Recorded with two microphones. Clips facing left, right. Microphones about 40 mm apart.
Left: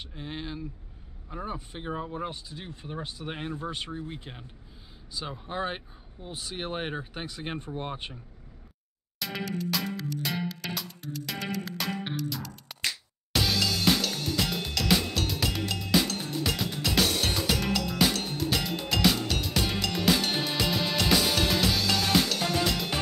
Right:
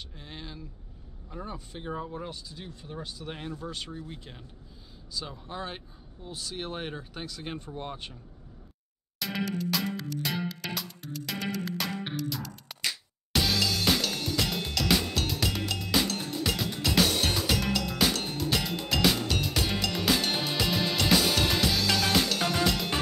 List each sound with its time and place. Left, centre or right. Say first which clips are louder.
0.1 s speech: left 6 dB; centre
9.2 s music: right 1 dB; centre